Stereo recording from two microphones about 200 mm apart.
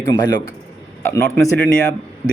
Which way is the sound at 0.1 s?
20° left (ahead or behind).